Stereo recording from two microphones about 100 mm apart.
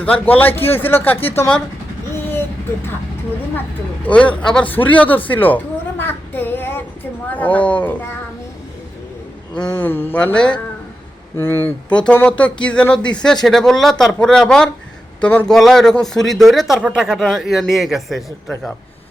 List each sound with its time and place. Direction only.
0.0 s speech: 15° left (ahead or behind)
2.1 s a sound: 20° left (ahead or behind)
4.0 s speech: 10° left (ahead or behind)
4.7 s a sound: 15° left (ahead or behind)
9.7 s speech: 20° left (ahead or behind)
11.3 s speech: 25° left (ahead or behind); by 18.5 s centre (ahead or behind)